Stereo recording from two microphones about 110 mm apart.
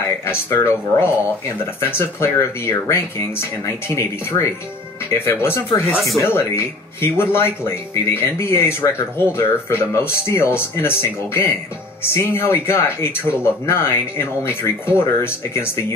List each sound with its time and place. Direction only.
0.2 s speech: 20° left (ahead or behind)
5.9 s speech: centre (ahead or behind)
6.2 s speech: 20° left (ahead or behind)